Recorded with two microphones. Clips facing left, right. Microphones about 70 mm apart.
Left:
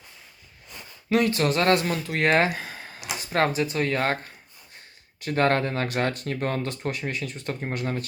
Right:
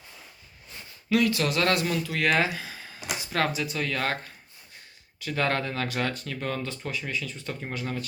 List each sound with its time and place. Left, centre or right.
1.1 s speech: left
3.3 s speech: left